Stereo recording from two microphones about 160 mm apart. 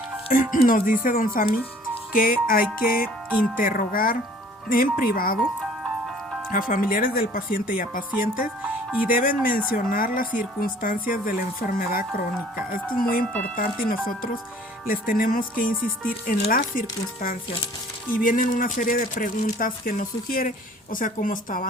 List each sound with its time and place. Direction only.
0.3 s speech: 60° left (ahead or behind)
6.5 s speech: 60° left (ahead or behind)
8.6 s speech: 10° right (ahead or behind)
9.2 s speech: 60° left (ahead or behind)
18.2 s speech: 60° left (ahead or behind)